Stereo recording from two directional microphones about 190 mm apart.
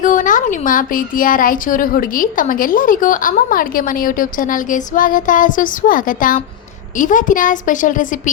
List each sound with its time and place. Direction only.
0.0 s a woman's voice: 45° left (ahead or behind)